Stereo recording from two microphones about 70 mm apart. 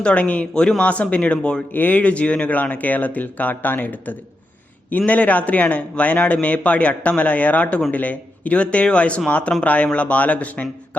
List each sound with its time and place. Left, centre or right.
0.0 s speech: centre
1.7 s a man's voice: left